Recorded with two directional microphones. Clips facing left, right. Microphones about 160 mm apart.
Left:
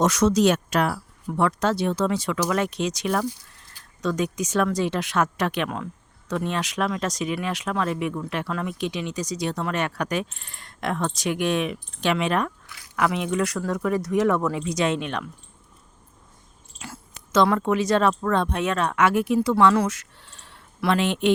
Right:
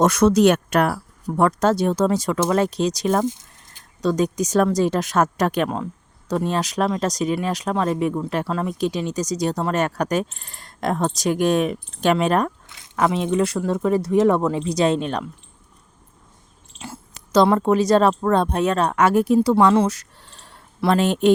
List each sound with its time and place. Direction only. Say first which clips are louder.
0.0 s speech: right 4 dB; 55° right (ahead or behind)
1.3 s speech: right 4 dB; 45° right (ahead or behind)
3.2 s a sound: right 5 dB; 20° right (ahead or behind)
4.0 s speech: right 5 dB; 35° right (ahead or behind)
12.6 s speech: right 3 dB; 25° right (ahead or behind)
16.7 s speech: right 4 dB; 25° right (ahead or behind)